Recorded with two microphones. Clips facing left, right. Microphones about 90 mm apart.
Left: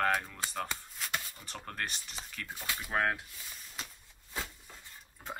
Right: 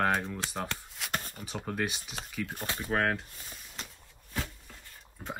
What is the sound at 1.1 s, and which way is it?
Beatboxing, 45° right (ahead or behind).